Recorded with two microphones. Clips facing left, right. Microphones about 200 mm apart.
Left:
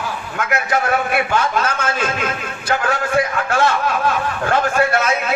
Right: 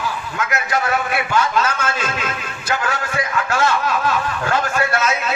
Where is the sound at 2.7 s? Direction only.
55° left (ahead or behind).